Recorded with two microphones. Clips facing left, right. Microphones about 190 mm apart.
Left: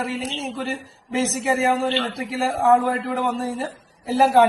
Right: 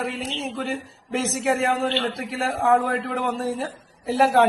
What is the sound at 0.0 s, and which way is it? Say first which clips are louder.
A man's voice: left 1 dB; centre (ahead or behind).